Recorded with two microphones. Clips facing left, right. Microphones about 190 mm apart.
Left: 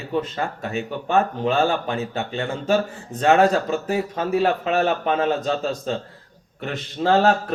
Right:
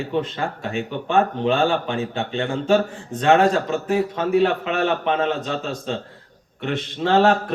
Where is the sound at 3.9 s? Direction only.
40° left (ahead or behind).